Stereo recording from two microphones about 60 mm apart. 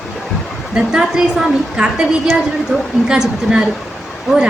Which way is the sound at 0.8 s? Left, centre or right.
Centre.